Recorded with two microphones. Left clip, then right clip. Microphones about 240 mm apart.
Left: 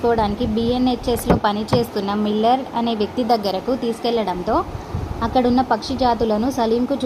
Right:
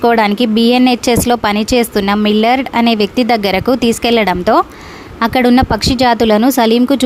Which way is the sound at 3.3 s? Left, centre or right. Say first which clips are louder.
Right 4 dB; right.